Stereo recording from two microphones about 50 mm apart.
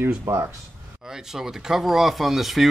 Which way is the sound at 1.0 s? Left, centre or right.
Centre.